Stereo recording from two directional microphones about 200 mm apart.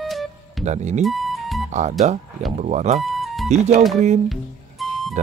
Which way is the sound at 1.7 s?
35° right (ahead or behind).